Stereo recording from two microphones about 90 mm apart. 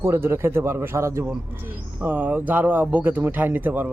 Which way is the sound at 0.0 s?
30° right (ahead or behind).